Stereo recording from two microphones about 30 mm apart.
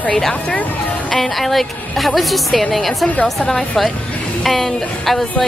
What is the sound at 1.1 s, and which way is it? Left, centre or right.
A woman's voice, centre.